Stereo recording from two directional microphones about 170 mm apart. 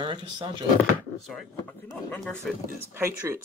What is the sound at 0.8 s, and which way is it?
Speech, 5° left (ahead or behind).